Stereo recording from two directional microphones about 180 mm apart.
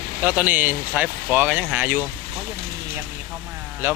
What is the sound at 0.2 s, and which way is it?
Speech, 10° right (ahead or behind).